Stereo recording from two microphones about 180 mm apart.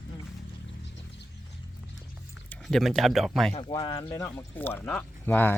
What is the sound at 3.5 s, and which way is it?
Speech, 30° left (ahead or behind).